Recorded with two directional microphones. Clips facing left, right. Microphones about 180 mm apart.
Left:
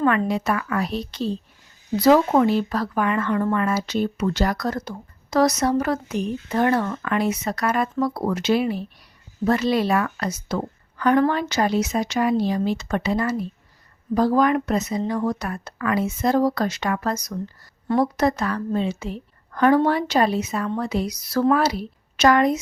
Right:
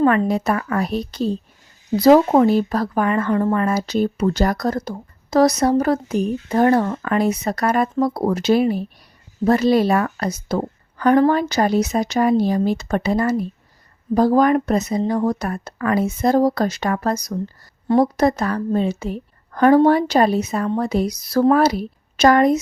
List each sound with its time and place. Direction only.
0.0 s speech: 35° right (ahead or behind)